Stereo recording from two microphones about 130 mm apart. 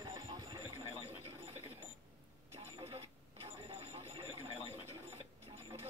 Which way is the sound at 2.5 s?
50° right (ahead or behind).